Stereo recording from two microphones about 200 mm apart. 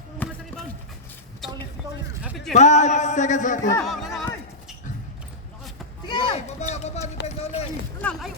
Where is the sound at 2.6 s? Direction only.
35° left (ahead or behind).